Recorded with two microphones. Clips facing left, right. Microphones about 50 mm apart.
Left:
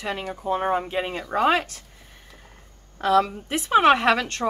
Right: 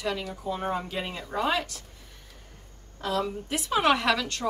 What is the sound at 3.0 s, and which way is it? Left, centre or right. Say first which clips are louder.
Speech: left 9 dB; left.